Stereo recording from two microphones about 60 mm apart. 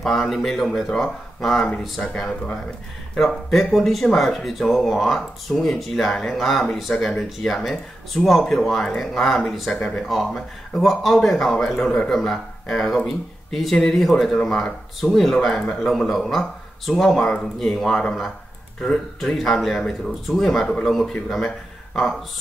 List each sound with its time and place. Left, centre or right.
0.0 s speech: centre
9.8 s speech: centre
10.0 s speech: centre
11.5 s a man's voice: centre